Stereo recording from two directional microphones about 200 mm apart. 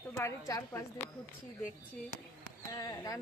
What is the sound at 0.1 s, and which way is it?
Speech, 15° left (ahead or behind).